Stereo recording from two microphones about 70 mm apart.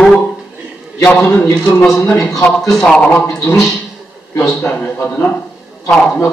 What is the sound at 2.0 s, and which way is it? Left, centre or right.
Speech, left.